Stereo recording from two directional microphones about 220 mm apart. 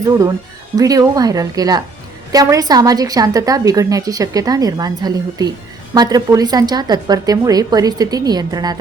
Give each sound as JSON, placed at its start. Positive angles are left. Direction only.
{"t": 0.8, "sound": "a woman's voice", "side_deg": -15}